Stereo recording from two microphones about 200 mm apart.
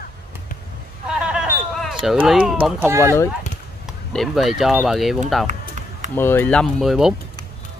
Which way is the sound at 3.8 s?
Centre (ahead or behind).